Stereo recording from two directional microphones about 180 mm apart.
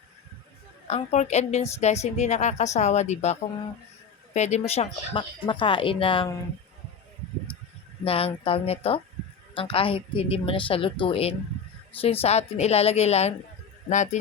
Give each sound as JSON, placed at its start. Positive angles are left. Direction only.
{"t": 0.9, "sound": "a woman's voice", "side_deg": 40}
{"t": 4.4, "sound": "speech", "side_deg": 40}
{"t": 8.0, "sound": "a woman's voice", "side_deg": 30}